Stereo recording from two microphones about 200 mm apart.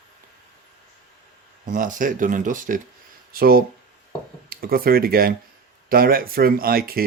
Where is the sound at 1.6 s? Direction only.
40° right (ahead or behind).